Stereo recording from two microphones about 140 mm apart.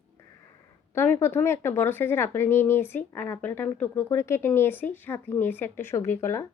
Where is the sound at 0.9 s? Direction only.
15° left (ahead or behind).